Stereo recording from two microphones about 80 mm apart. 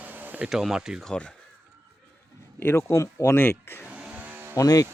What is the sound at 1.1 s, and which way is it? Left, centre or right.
Speech, centre.